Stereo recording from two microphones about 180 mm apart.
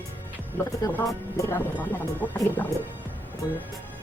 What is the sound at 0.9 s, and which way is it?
Speech, 10° left (ahead or behind).